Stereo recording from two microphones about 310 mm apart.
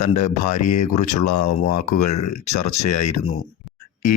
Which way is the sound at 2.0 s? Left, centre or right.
Left.